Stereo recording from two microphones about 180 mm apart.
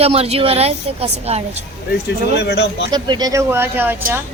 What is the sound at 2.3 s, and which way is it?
Speech, 65° left (ahead or behind).